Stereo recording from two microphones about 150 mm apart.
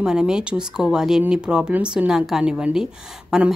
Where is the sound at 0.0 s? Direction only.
5° right (ahead or behind).